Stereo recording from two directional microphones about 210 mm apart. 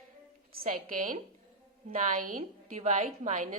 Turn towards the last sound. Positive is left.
turn(degrees=-35)  # may be behind; listen again after turning